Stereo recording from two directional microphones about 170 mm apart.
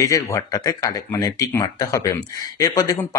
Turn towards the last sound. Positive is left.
turn(degrees=20)  # may be behind; listen again after turning